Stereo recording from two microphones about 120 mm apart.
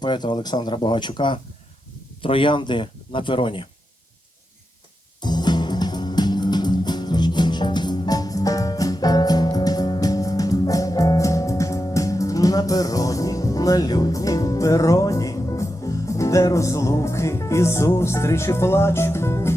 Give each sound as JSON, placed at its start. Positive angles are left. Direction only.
{"t": 0.0, "sound": "speech", "side_deg": 40}
{"t": 5.2, "sound": "music", "side_deg": 35}